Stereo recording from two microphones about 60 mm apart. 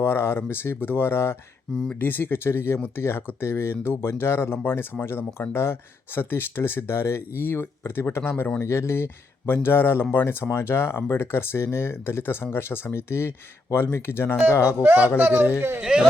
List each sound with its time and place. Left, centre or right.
0.0 s speech: left
1.7 s speech: centre
2.0 s speech: left
14.8 s speech: right
15.8 s speech: centre